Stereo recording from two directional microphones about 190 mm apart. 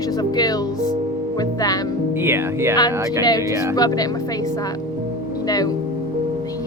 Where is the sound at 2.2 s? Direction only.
15° right (ahead or behind).